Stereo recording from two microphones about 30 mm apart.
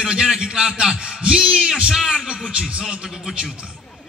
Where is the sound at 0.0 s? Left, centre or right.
Right.